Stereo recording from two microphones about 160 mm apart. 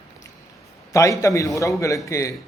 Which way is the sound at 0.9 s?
20° left (ahead or behind).